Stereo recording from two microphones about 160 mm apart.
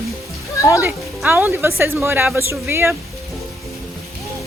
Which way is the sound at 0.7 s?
15° right (ahead or behind).